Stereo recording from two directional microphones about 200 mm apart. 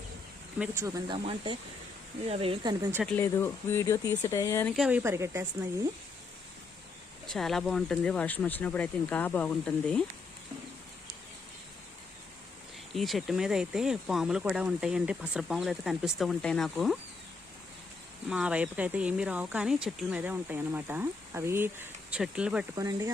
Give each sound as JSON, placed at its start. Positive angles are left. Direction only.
{"t": 0.6, "sound": "speech", "side_deg": -15}
{"t": 3.0, "sound": "speech", "side_deg": 10}
{"t": 4.7, "sound": "speech", "side_deg": -5}
{"t": 7.3, "sound": "speech", "side_deg": 0}
{"t": 12.9, "sound": "speech", "side_deg": 0}
{"t": 18.3, "sound": "speech", "side_deg": -5}
{"t": 22.7, "sound": "speech", "side_deg": -15}